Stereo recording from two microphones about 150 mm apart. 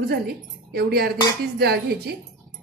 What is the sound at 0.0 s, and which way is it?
Speech, 90° right.